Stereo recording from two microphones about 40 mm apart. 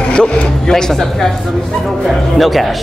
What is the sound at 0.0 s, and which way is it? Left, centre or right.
Music, left.